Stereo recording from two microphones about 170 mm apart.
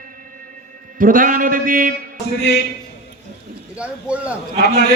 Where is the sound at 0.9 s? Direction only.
55° right (ahead or behind).